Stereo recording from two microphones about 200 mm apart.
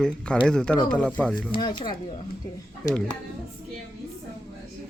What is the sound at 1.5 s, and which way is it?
Speech, 25° left (ahead or behind).